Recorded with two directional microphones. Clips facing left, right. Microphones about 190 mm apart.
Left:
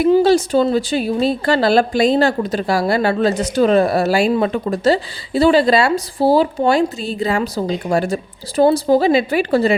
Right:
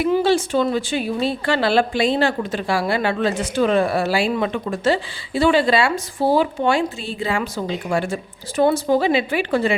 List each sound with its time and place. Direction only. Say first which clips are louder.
0.0 s a woman's voice: left 5 dB; 40° left (ahead or behind)